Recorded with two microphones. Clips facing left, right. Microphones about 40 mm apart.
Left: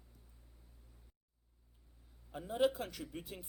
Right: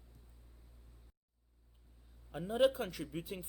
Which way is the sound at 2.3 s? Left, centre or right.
Right.